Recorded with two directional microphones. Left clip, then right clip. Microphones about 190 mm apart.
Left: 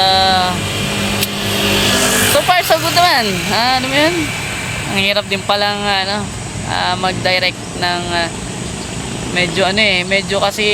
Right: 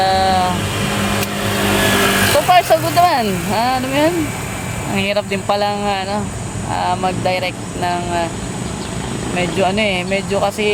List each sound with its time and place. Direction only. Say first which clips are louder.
0.0 s vehicle: left 2 dB; 5° right (ahead or behind)
1.5 s vehicle: left 2 dB; 20° right (ahead or behind)
1.9 s vehicle: left 1 dB; 40° right (ahead or behind)
2.5 s speech: even; centre (ahead or behind)
9.3 s speech: left 3 dB; centre (ahead or behind)